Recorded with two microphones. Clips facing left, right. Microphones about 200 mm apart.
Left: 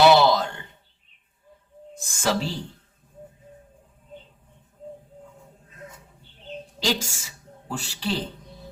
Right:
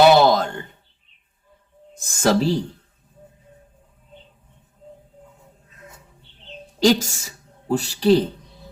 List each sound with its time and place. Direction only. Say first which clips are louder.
0.0 s a sound: right 3 dB; 50° right (ahead or behind)
2.0 s speech: right 7 dB; 40° right (ahead or behind)
6.7 s speech: right 10 dB; 45° right (ahead or behind)